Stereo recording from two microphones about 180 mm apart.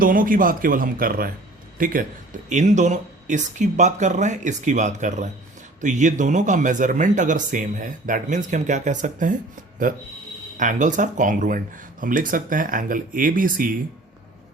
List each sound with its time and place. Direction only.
0.0 s speech: 50° right (ahead or behind)